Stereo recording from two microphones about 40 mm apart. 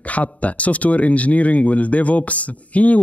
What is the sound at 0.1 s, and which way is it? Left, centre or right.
Speech, left.